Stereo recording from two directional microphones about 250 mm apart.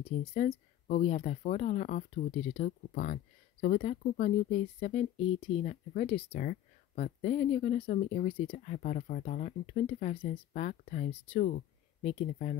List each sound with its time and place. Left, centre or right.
0.0 s speech: left